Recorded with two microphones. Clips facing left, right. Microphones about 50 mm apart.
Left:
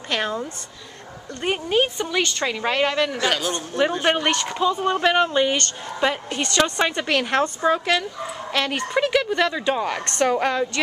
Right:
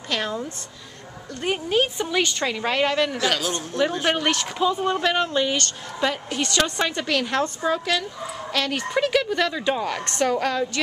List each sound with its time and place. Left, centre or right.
0.1 s a woman's voice: centre
2.0 s a woman's voice: centre
2.4 s a woman's voice: centre
4.8 s a woman's voice: centre
6.3 s a woman's voice: centre
6.6 s a woman's voice: centre
8.9 s a woman's voice: centre